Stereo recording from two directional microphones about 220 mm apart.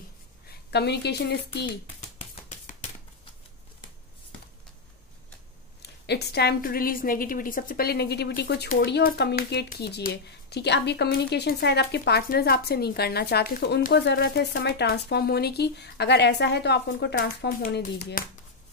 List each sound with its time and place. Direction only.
0.5 s a woman's voice: 50° left (ahead or behind)
2.0 s a sound: 35° left (ahead or behind)
5.8 s a woman's voice: 50° left (ahead or behind)